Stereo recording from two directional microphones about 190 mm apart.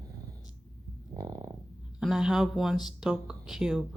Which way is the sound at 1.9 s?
5° right (ahead or behind).